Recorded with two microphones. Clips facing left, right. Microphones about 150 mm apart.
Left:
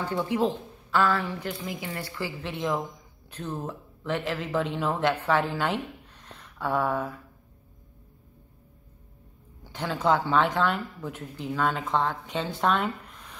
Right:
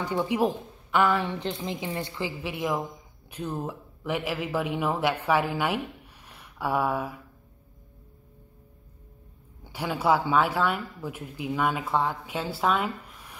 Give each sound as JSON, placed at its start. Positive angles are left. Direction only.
{"t": 0.0, "sound": "speech", "side_deg": -15}
{"t": 9.7, "sound": "speech", "side_deg": -10}